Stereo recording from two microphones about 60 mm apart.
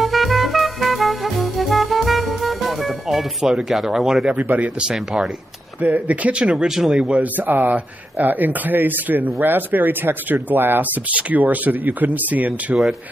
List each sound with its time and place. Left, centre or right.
0.0 s music: centre
4.3 s speech: right
4.9 s speech: centre
5.8 s speech: right
6.4 s speech: centre
7.4 s speech: right